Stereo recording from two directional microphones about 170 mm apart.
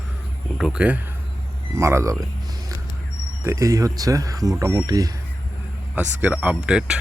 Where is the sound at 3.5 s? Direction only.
20° right (ahead or behind).